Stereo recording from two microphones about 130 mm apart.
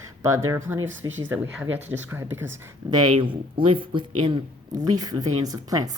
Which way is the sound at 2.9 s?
35° right (ahead or behind).